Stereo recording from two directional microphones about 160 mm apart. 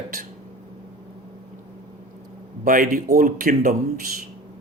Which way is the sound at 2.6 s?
60° right (ahead or behind).